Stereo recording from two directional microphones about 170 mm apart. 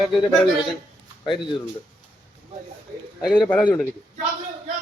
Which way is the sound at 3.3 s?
5° left (ahead or behind).